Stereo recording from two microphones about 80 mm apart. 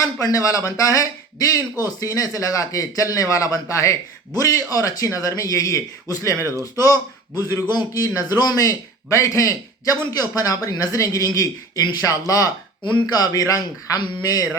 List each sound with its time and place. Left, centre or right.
0.0 s a man's voice: left